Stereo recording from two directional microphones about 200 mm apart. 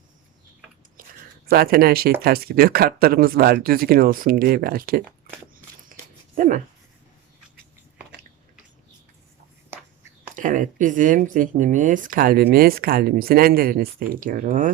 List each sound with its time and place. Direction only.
1.5 s speech: 50° right (ahead or behind)
6.3 s speech: 40° right (ahead or behind)
10.3 s speech: 40° right (ahead or behind)